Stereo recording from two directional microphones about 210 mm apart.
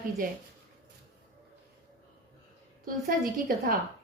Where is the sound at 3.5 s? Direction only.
40° right (ahead or behind).